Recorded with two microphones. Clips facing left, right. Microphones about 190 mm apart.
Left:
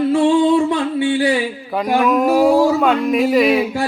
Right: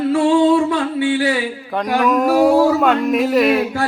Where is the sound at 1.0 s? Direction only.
20° left (ahead or behind).